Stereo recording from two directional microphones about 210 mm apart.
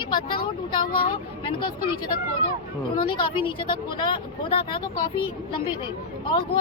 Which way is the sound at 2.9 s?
20° left (ahead or behind).